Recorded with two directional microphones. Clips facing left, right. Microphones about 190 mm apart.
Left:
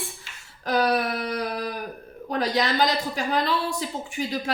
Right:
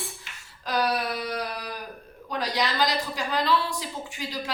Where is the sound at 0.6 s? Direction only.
50° left (ahead or behind).